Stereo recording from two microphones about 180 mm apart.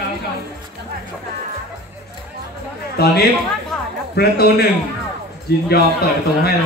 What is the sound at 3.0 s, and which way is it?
A man's voice, 60° left (ahead or behind).